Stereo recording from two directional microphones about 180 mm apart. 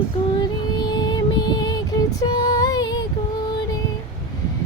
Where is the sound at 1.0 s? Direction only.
25° left (ahead or behind).